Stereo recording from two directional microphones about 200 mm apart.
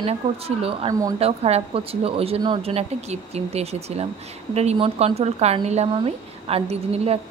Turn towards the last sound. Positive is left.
turn(degrees=-30)  # may be behind; listen again after turning